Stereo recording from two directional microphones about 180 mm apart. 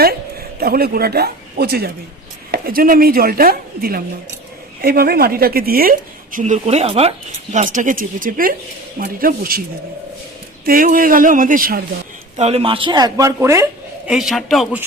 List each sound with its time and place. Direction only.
0.6 s a woman's voice: 60° right (ahead or behind); by 7.1 s 35° right (ahead or behind)
7.5 s speech: 45° right (ahead or behind)
10.7 s speech: 50° right (ahead or behind)
12.4 s speech: 35° right (ahead or behind); by 13.7 s 15° right (ahead or behind)
14.1 s a man's voice: centre (ahead or behind)